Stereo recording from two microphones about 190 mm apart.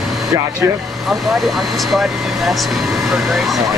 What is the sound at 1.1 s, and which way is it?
Speech, centre (ahead or behind).